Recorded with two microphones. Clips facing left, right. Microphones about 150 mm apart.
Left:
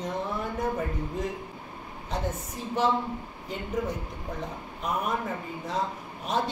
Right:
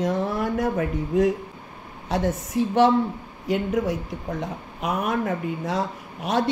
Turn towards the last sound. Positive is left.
turn(degrees=-80)